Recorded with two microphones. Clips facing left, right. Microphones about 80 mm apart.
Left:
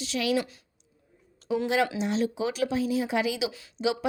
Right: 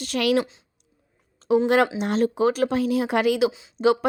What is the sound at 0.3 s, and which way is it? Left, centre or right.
Speech, right.